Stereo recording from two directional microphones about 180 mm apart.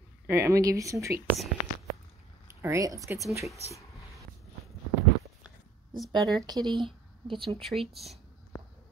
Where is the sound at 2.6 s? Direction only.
15° right (ahead or behind).